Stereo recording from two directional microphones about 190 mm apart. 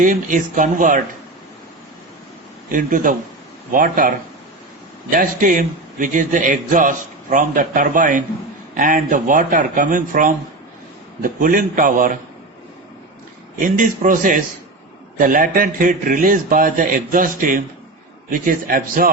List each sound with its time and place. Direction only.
0.0 s a man's voice: 45° right (ahead or behind)
2.7 s a man's voice: 45° right (ahead or behind)
5.1 s a man's voice: 45° right (ahead or behind)
13.6 s a man's voice: 45° right (ahead or behind)